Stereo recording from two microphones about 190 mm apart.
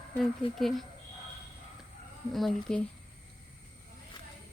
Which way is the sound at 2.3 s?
Centre (ahead or behind).